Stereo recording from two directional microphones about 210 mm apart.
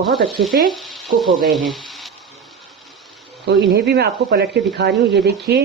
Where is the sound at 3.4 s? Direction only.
50° right (ahead or behind).